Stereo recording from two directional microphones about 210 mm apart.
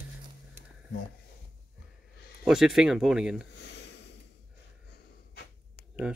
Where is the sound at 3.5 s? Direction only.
55° left (ahead or behind).